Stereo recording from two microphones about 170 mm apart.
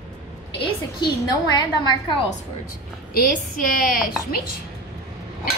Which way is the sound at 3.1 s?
50° left (ahead or behind).